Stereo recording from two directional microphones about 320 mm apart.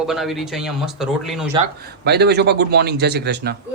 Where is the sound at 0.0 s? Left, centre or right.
Centre.